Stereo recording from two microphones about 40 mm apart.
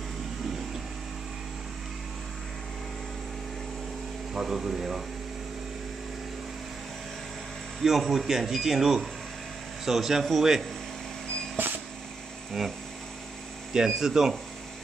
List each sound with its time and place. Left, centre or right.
4.3 s speech: centre
7.8 s speech: centre
11.5 s a sound: right
13.7 s speech: centre